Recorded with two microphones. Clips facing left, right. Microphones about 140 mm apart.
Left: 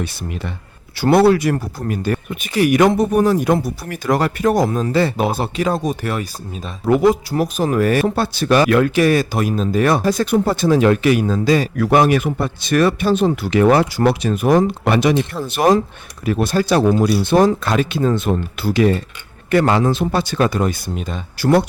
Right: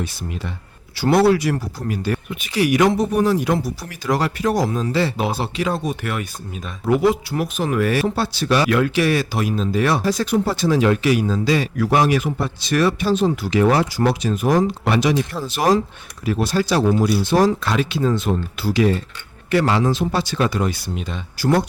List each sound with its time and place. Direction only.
0.9 s speech: 55° left (ahead or behind)
21.3 s speech: 65° left (ahead or behind)